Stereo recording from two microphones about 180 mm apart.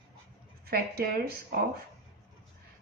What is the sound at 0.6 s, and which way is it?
Speech, 55° right (ahead or behind).